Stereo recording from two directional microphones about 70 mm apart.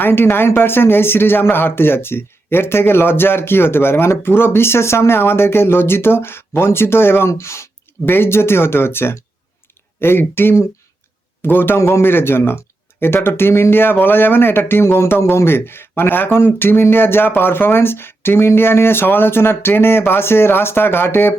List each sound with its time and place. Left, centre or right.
0.0 s speech: left
8.0 s speech: left